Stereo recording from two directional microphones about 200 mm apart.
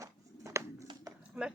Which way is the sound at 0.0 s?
15° right (ahead or behind).